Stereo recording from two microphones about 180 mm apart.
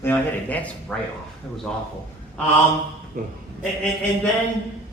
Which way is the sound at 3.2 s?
50° right (ahead or behind).